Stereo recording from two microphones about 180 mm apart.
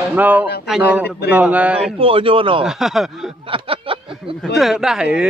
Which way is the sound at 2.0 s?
30° right (ahead or behind).